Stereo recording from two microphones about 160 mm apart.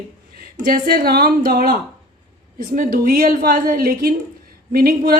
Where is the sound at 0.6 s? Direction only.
65° right (ahead or behind).